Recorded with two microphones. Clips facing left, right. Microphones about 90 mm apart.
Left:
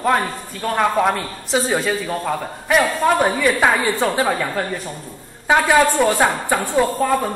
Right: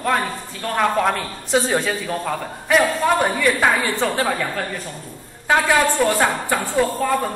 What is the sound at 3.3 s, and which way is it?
A man's voice, 15° left (ahead or behind).